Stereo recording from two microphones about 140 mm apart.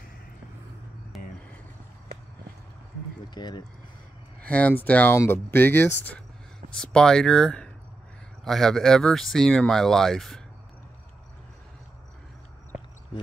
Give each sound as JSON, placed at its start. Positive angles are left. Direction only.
{"t": 1.1, "sound": "vehicle", "side_deg": 0}
{"t": 3.3, "sound": "speech", "side_deg": 30}
{"t": 4.4, "sound": "speech", "side_deg": 10}